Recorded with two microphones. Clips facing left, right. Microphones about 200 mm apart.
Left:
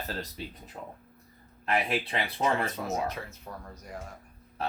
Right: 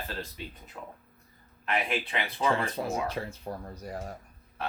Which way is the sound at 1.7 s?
35° left (ahead or behind).